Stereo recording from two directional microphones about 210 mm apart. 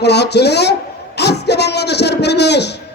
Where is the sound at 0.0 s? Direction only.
55° left (ahead or behind).